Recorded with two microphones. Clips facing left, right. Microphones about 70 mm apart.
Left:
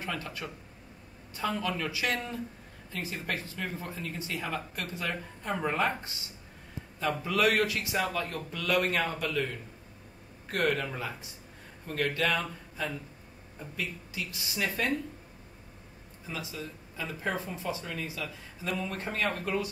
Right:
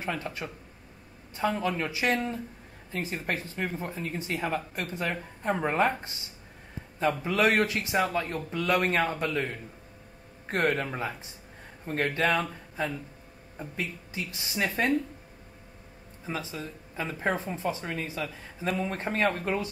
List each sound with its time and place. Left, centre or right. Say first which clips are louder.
0.0 s a woman's voice: right 3 dB; right
16.3 s speech: right 4 dB; right